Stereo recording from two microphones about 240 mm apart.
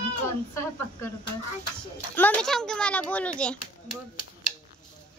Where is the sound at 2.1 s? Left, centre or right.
Centre.